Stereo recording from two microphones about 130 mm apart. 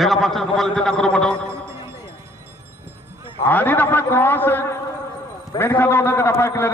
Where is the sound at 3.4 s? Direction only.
15° left (ahead or behind).